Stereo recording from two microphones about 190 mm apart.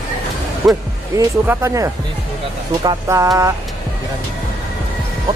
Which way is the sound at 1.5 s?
15° right (ahead or behind).